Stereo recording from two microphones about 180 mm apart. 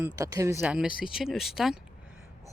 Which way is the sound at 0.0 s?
15° right (ahead or behind).